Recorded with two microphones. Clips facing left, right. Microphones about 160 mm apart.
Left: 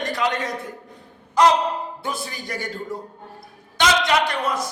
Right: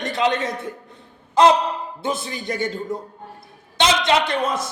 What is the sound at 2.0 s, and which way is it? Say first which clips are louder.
A man's voice: right 4 dB; 20° right (ahead or behind).